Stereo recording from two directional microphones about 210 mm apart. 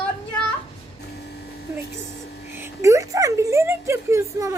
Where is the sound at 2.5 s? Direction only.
10° right (ahead or behind).